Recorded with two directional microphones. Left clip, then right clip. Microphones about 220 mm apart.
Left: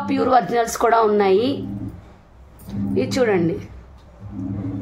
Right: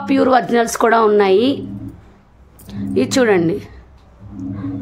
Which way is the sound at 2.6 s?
30° right (ahead or behind).